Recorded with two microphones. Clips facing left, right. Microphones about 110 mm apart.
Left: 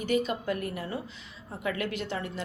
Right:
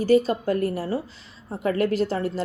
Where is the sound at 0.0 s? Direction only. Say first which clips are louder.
Right 9 dB; 35° right (ahead or behind).